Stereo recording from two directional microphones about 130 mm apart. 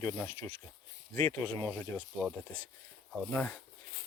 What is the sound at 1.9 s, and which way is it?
Speech, 10° right (ahead or behind).